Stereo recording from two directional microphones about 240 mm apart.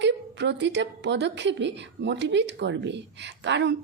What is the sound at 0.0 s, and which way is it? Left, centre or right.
A woman's voice, right.